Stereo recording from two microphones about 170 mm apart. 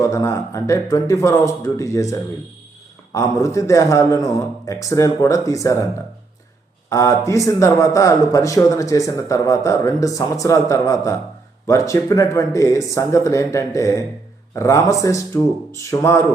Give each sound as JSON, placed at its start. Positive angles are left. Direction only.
{"t": 0.0, "sound": "speech", "side_deg": 20}
{"t": 6.9, "sound": "speech", "side_deg": 20}